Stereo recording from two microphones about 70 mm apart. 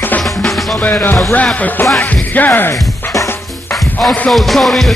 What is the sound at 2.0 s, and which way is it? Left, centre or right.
Music, left.